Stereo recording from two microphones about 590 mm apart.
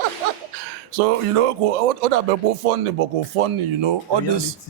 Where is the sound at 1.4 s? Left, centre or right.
Right.